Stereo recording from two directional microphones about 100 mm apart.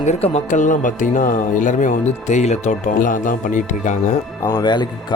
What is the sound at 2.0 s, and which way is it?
Speech, 90° left.